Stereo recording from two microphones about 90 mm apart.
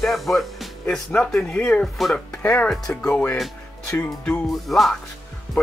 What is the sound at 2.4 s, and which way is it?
Speech, 15° left (ahead or behind).